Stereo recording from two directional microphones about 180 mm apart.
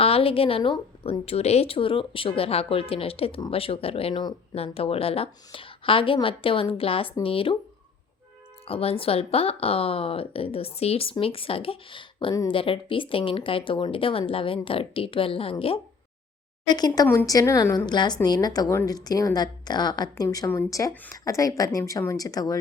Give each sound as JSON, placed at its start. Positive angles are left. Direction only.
{"t": 0.0, "sound": "a woman's voice", "side_deg": 30}
{"t": 8.6, "sound": "a woman's voice", "side_deg": 30}